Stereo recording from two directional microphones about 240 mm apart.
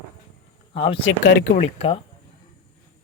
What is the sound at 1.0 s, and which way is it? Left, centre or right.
Speech, left.